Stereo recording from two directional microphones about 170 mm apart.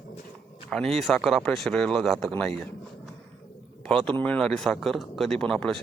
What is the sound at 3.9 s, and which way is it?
Speech, 5° left (ahead or behind).